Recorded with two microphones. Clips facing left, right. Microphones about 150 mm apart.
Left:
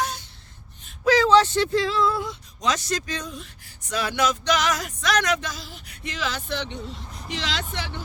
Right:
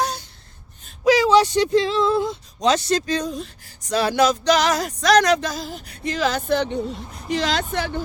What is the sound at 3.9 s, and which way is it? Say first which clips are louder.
Music: right 6 dB; 35° right (ahead or behind).